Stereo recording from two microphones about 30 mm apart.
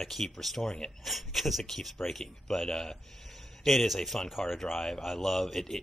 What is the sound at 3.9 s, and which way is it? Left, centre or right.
A man's voice, centre.